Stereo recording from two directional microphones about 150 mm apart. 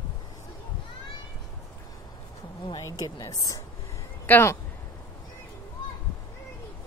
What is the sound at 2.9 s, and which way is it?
Speech, 25° left (ahead or behind).